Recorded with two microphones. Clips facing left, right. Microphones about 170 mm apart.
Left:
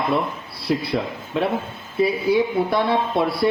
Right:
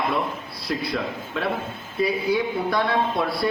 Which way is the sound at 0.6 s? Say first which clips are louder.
Left 5 dB; 25° left (ahead or behind).